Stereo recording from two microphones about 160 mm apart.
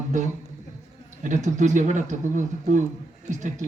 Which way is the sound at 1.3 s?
50° right (ahead or behind).